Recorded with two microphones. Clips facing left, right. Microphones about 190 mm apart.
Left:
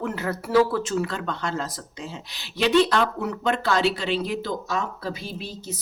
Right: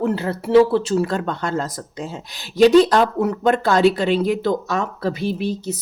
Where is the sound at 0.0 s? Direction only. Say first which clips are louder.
Right 7 dB; 30° right (ahead or behind).